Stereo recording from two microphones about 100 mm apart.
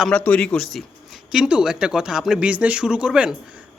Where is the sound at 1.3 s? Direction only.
10° right (ahead or behind).